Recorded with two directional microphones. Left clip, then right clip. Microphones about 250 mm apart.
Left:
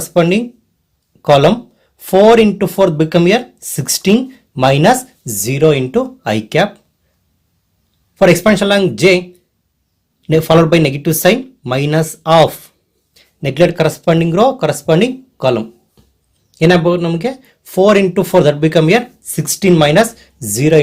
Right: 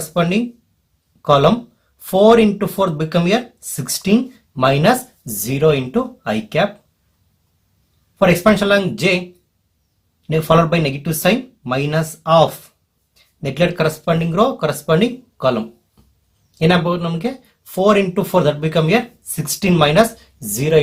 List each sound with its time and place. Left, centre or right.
0.1 s speech: left
8.4 s speech: left
10.2 s speech: left